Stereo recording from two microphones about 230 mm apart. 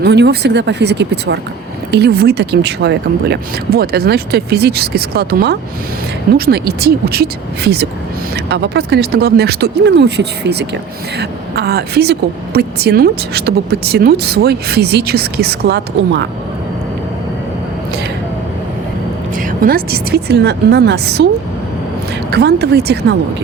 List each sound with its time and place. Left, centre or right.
0.0 s speech: right
19.4 s speech: right
22.3 s speech: right